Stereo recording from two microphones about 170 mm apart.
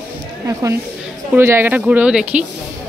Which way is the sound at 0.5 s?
20° right (ahead or behind).